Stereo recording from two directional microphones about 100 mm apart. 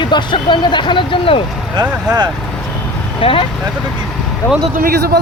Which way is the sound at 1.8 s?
45° right (ahead or behind).